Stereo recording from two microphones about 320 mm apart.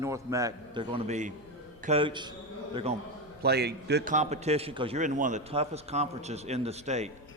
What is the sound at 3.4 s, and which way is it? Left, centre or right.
A man's voice, right.